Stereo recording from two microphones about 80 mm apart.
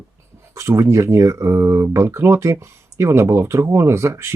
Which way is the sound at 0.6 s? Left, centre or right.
Right.